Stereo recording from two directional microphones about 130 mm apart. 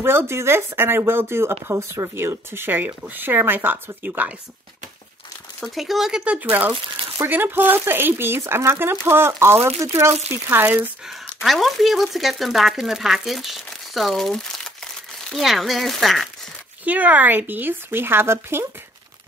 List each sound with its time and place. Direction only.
0.0 s speech: 20° right (ahead or behind)
5.6 s speech: centre (ahead or behind)
11.4 s speech: centre (ahead or behind)
16.8 s speech: 10° right (ahead or behind)